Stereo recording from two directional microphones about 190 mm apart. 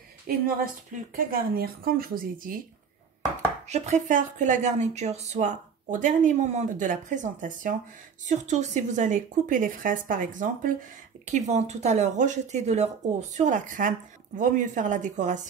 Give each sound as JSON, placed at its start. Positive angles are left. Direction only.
{"t": 0.3, "sound": "a woman's voice", "side_deg": -50}
{"t": 3.6, "sound": "a woman's voice", "side_deg": -35}